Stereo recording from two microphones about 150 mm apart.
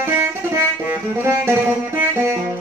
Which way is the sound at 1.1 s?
15° right (ahead or behind).